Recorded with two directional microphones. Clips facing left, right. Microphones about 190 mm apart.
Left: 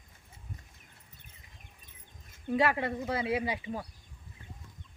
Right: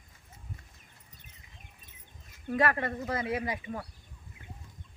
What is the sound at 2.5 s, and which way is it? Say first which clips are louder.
Speech: even; 15° left (ahead or behind).